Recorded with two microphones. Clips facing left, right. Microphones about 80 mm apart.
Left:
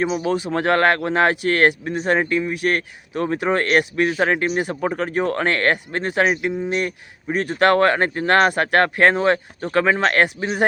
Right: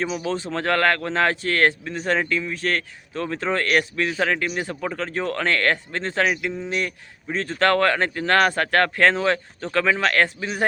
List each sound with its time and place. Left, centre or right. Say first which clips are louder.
0.0 s speech: left 5 dB; left
4.4 s a man's voice: left 5 dB; left
4.9 s speech: left 4 dB; left
6.7 s speech: left 4 dB; left
9.6 s speech: left 4 dB; centre
9.8 s speech: left 2 dB; left